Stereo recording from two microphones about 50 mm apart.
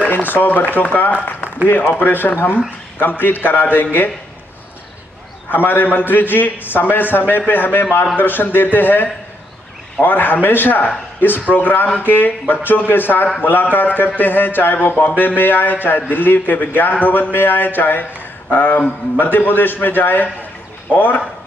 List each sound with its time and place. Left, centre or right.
0.1 s speech: left
5.5 s speech: left